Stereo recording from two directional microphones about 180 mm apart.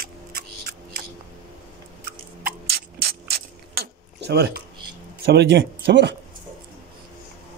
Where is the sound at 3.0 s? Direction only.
65° right (ahead or behind).